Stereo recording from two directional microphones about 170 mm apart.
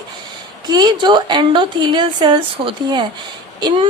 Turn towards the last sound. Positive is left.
turn(degrees=-25)  # may be behind; listen again after turning